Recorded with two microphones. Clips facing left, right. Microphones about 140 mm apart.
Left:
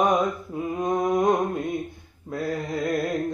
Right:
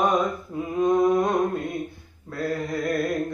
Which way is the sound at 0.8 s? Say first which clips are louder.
Right 3 dB; 15° left (ahead or behind).